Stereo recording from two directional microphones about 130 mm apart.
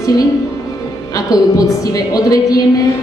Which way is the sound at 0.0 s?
30° left (ahead or behind).